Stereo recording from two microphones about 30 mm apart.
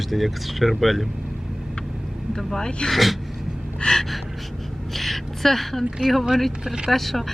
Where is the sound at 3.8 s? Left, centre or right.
Left.